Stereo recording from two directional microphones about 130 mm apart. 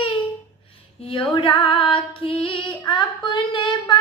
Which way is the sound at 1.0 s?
40° left (ahead or behind).